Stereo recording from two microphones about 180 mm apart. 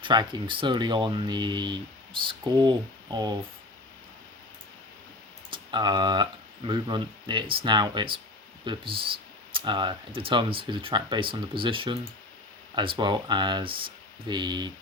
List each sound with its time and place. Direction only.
0.0 s speech: 25° right (ahead or behind)
5.5 s speech: 25° right (ahead or behind)